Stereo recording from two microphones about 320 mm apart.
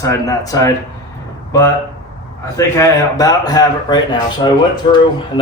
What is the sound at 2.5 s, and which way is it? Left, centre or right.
A man's voice, centre.